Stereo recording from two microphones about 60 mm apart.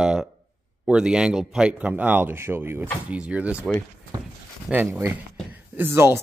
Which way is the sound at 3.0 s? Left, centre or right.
Right.